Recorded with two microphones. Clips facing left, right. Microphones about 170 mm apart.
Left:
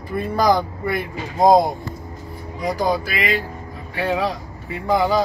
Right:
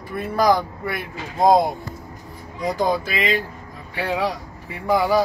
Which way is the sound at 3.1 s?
15° right (ahead or behind).